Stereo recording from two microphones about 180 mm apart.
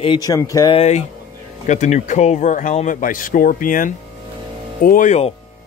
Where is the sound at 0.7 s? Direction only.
35° left (ahead or behind).